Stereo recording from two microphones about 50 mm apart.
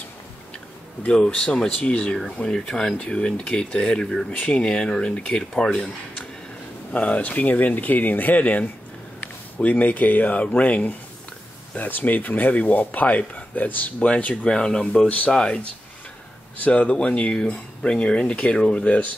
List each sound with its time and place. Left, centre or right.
1.1 s speech: centre
4.3 s speech: left; by 5.9 s centre
6.9 s speech: left